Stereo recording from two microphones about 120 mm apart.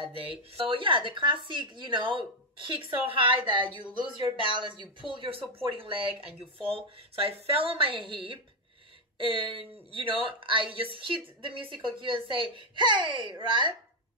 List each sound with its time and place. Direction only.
0.0 s speech: 45° right (ahead or behind)